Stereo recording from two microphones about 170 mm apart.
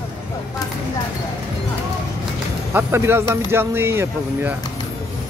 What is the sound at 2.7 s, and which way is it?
Speech, 15° right (ahead or behind).